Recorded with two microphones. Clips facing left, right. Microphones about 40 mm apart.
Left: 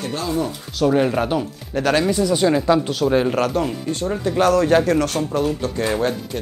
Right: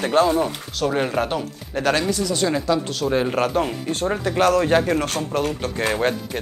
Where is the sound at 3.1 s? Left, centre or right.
Centre.